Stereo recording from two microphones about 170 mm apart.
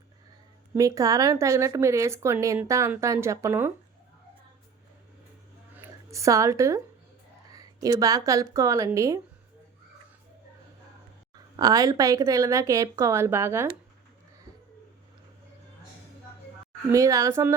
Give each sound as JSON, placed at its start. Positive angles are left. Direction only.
{"t": 0.8, "sound": "a woman's voice", "side_deg": -20}
{"t": 5.7, "sound": "speech", "side_deg": -15}
{"t": 11.5, "sound": "a woman's voice", "side_deg": -20}
{"t": 16.9, "sound": "a woman's voice", "side_deg": -20}